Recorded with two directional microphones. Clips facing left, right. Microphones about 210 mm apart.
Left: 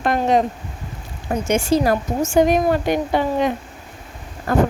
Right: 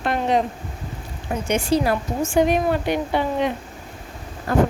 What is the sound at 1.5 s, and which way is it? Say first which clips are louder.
Speech: left 2 dB; 45° left (ahead or behind).